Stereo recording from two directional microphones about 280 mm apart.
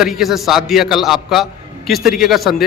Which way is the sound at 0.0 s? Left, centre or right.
Centre.